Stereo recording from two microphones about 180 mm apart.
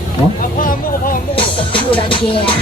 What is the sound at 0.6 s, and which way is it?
Vehicle, 50° left (ahead or behind).